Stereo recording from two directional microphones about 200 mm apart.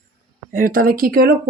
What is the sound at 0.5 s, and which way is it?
Speech, 45° right (ahead or behind).